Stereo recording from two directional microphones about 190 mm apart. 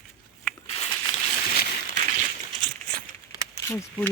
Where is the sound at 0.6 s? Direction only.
30° left (ahead or behind).